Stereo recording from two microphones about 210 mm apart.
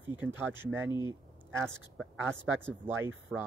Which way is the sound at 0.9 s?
20° left (ahead or behind).